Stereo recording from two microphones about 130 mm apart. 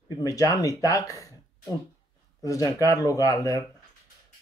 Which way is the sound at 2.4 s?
25° left (ahead or behind).